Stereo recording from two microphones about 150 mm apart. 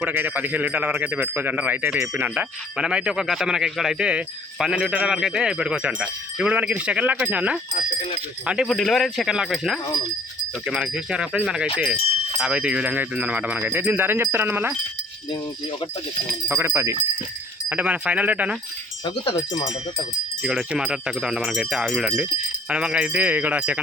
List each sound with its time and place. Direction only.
0.0 s a man's voice: 10° right (ahead or behind)
16.5 s a man's voice: 15° right (ahead or behind)
19.0 s speech: 35° left (ahead or behind)
20.4 s a man's voice: 5° right (ahead or behind)